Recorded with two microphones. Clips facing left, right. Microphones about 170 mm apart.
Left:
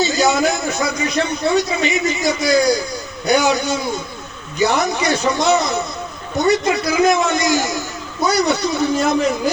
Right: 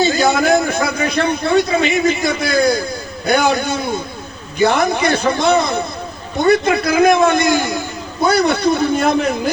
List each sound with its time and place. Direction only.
0.0 s a man's voice: 55° right (ahead or behind)